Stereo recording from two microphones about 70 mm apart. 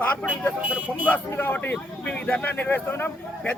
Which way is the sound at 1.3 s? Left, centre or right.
Left.